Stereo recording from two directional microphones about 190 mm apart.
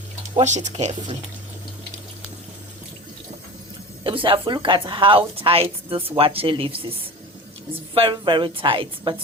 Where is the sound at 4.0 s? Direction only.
25° right (ahead or behind).